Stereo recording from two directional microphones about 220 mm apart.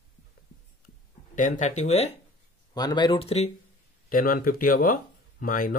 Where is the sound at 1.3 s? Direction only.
35° left (ahead or behind).